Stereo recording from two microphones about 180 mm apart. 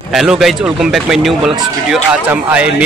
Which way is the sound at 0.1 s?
Centre (ahead or behind).